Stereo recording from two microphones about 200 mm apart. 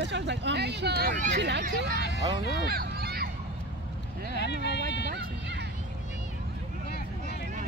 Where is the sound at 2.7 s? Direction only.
50° right (ahead or behind).